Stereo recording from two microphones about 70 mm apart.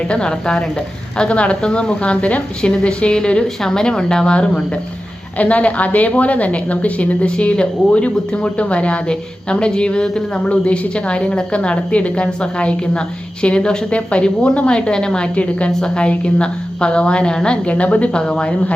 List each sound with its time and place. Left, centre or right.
0.1 s a woman's voice: centre